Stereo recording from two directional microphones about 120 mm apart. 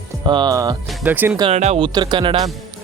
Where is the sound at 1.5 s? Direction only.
65° right (ahead or behind).